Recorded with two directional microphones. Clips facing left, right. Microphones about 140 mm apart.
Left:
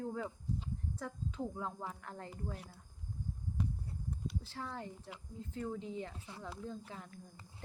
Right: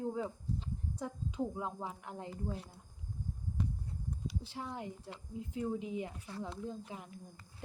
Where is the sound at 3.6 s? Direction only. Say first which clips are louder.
Right 1 dB; 5° left (ahead or behind).